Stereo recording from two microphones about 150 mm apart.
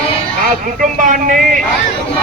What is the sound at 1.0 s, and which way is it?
Speech, 60° right (ahead or behind).